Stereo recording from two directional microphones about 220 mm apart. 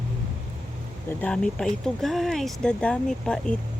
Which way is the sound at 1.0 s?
5° left (ahead or behind).